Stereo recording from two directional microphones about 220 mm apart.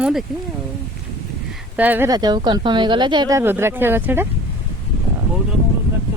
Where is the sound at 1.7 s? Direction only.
10° right (ahead or behind).